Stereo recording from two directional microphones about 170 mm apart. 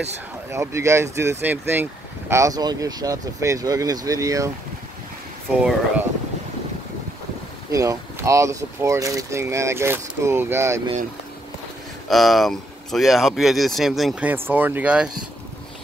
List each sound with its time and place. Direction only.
0.5 s speech: 15° right (ahead or behind)
5.6 s speech: 5° right (ahead or behind)
7.7 s speech: 20° right (ahead or behind)
12.1 s speech: centre (ahead or behind)